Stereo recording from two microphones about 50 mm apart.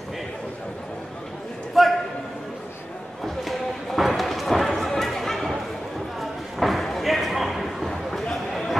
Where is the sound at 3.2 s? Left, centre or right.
Centre.